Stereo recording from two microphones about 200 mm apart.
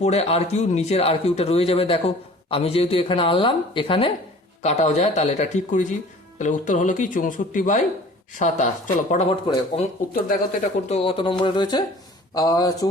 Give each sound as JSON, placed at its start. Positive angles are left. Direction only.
{"t": 0.0, "sound": "speech", "side_deg": 30}
{"t": 10.2, "sound": "speech", "side_deg": 35}